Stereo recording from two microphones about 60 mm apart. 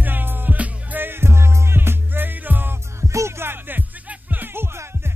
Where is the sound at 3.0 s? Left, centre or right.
Right.